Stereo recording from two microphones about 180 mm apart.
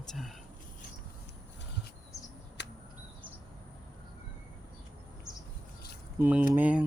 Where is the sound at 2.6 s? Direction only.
75° left (ahead or behind).